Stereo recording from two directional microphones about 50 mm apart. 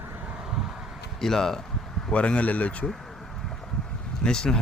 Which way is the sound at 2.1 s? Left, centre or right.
Left.